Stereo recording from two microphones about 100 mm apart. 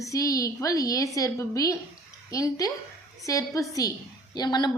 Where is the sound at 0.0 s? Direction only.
35° left (ahead or behind).